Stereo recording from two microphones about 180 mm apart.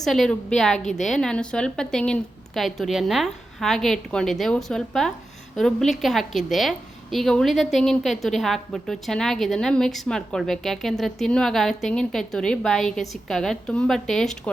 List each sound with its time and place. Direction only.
0.0 s a woman's voice: centre (ahead or behind)
0.8 s a woman's voice: 40° left (ahead or behind)
1.0 s a woman's voice: centre (ahead or behind)